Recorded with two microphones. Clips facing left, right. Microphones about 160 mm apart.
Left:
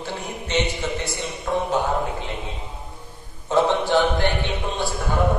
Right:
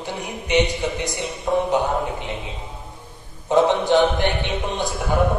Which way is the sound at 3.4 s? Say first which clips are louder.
Right 3 dB; 20° right (ahead or behind).